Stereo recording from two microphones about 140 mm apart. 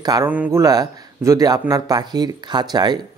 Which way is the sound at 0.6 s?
25° right (ahead or behind).